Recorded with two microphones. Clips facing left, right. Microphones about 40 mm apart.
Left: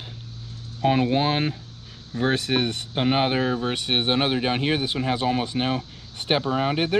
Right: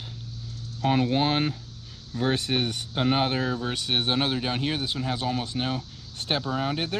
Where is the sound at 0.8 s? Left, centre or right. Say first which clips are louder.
Left 3 dB; left.